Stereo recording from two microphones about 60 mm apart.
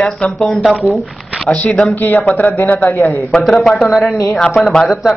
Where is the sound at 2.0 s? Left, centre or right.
Left.